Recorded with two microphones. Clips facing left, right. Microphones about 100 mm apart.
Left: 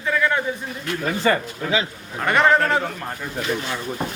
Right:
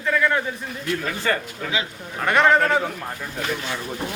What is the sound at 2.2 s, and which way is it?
Speech, centre (ahead or behind).